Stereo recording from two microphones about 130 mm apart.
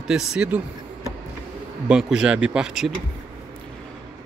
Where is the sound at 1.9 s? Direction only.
5° right (ahead or behind).